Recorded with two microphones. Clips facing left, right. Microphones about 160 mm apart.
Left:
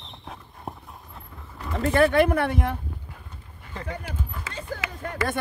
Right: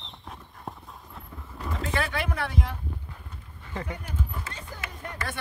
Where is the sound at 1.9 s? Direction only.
50° left (ahead or behind).